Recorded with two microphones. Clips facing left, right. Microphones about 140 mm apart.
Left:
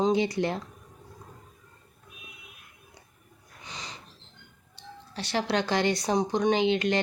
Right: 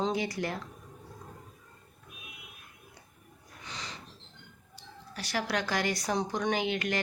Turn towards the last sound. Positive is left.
turn(degrees=25)  # may be behind; listen again after turning